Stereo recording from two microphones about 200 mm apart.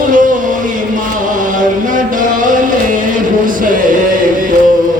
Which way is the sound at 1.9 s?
40° right (ahead or behind).